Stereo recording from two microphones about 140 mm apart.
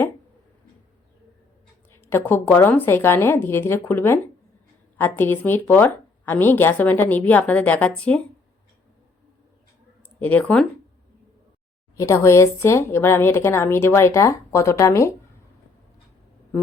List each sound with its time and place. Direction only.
2.0 s a woman's voice: 15° left (ahead or behind)
10.2 s a woman's voice: 10° left (ahead or behind)
11.9 s a woman's voice: 20° left (ahead or behind)